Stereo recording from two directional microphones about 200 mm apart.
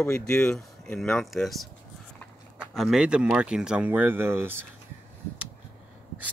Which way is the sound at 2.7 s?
Centre (ahead or behind).